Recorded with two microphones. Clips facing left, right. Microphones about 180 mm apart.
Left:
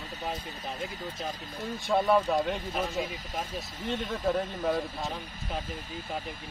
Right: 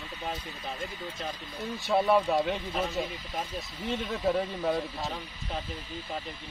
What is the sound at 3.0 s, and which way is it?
Speech, 45° left (ahead or behind).